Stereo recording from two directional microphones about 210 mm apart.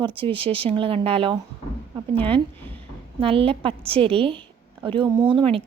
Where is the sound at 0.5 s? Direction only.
25° right (ahead or behind).